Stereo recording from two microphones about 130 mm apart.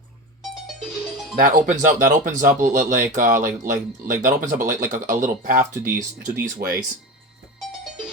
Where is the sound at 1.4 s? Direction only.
80° right.